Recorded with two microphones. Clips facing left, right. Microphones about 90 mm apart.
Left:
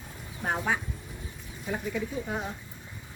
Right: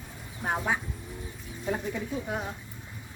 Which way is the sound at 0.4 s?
5° right (ahead or behind).